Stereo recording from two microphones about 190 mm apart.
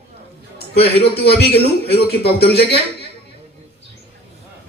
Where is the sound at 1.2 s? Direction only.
60° left (ahead or behind).